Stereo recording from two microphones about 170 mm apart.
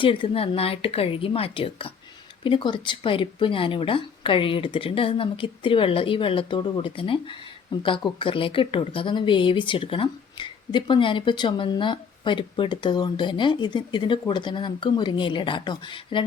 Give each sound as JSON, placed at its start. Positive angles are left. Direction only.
{"t": 0.0, "sound": "speech", "side_deg": 30}